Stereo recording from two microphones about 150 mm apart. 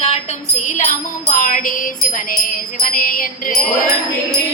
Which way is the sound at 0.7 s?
55° left (ahead or behind).